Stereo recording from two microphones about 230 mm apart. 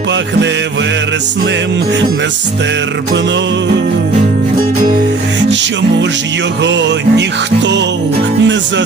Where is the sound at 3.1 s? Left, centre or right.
Right.